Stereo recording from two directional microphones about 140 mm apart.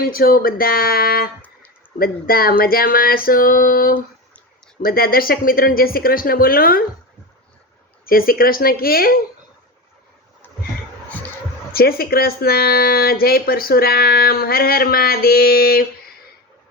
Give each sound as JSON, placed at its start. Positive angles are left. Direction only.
{"t": 0.0, "sound": "speech", "side_deg": 90}
{"t": 8.0, "sound": "speech", "side_deg": 90}
{"t": 11.7, "sound": "speech", "side_deg": 90}